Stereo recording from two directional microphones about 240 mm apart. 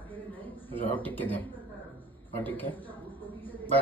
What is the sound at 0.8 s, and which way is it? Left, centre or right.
Speech, centre.